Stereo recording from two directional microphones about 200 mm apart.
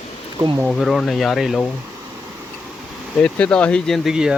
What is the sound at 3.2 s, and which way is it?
Speech, 5° left (ahead or behind).